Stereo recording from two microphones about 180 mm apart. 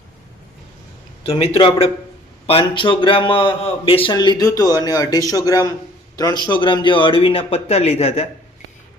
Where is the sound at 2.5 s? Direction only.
30° left (ahead or behind).